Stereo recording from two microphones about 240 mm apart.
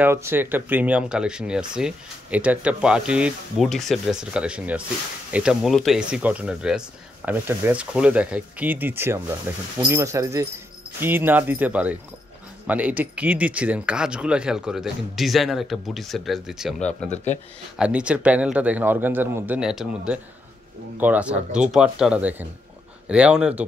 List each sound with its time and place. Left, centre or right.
0.0 s speech: centre
17.1 s speech: left
17.7 s speech: centre